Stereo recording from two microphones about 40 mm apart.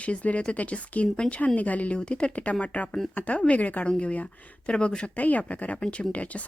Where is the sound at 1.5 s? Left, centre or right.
Left.